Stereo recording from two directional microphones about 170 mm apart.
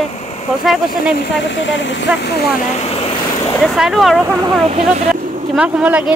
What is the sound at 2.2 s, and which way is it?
Speech, 75° left (ahead or behind).